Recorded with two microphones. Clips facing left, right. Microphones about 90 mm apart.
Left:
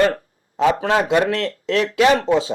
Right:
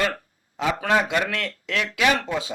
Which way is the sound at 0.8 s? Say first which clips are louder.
Left 5 dB; 30° left (ahead or behind).